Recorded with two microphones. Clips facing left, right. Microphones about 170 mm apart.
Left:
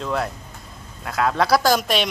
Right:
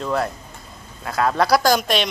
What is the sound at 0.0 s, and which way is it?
Speech, centre (ahead or behind).